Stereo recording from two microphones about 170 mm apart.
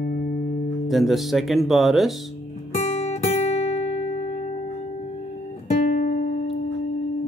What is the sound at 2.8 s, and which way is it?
Guitar, 40° left (ahead or behind).